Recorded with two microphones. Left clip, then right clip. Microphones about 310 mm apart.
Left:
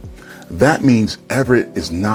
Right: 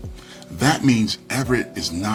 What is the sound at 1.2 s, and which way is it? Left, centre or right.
Speech, left.